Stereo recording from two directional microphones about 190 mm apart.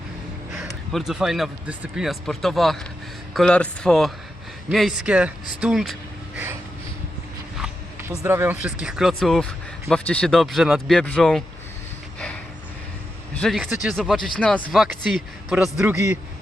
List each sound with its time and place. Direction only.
0.5 s speech: centre (ahead or behind)
8.2 s speech: 10° right (ahead or behind)
13.3 s speech: centre (ahead or behind)